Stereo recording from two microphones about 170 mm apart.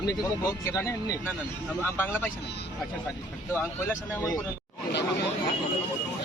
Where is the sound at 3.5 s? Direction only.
10° left (ahead or behind).